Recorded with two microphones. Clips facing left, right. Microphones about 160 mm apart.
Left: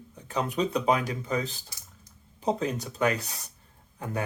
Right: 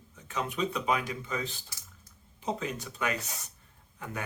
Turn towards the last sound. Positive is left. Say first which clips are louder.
# left 6 dB
turn(degrees=35)  # may be behind; listen again after turning